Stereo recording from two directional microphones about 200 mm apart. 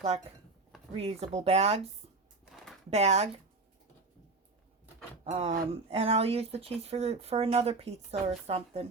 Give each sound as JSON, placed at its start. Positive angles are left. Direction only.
{"t": 0.9, "sound": "speech", "side_deg": -30}
{"t": 2.9, "sound": "speech", "side_deg": -35}
{"t": 5.2, "sound": "speech", "side_deg": -30}